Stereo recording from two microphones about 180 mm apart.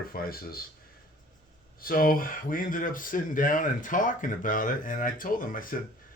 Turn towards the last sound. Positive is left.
turn(degrees=50)  # may be behind; listen again after turning